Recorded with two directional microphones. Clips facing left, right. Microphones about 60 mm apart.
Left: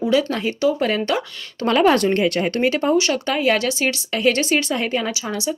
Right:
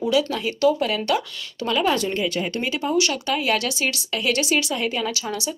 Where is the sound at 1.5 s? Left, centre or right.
Left.